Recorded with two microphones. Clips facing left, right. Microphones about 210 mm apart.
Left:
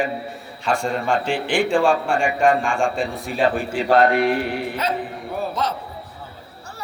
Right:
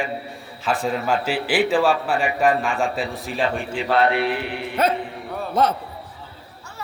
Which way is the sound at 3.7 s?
45° left (ahead or behind).